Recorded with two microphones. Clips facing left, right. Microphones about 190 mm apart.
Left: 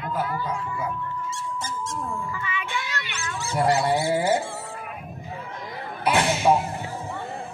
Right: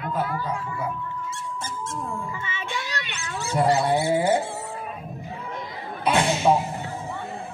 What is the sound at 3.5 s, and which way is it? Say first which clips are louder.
Speech: right 1 dB; 10° left (ahead or behind).